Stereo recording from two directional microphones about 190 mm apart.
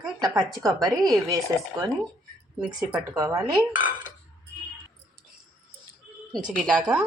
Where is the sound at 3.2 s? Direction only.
15° right (ahead or behind).